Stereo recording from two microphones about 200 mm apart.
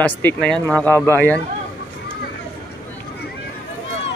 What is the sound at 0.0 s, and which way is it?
A man's voice, 10° left (ahead or behind).